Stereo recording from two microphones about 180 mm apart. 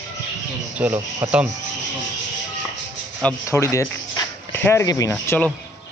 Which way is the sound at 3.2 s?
15° left (ahead or behind).